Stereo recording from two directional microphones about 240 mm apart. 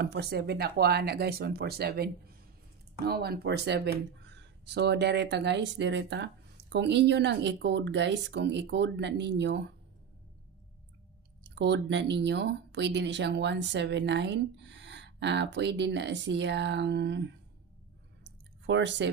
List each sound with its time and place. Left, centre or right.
0.0 s speech: right
3.1 s speech: right
11.4 s speech: right
18.2 s a sound: right